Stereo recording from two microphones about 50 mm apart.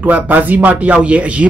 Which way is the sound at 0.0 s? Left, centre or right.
Right.